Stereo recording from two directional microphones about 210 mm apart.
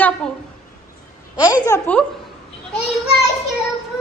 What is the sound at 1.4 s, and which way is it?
Speech, 20° left (ahead or behind).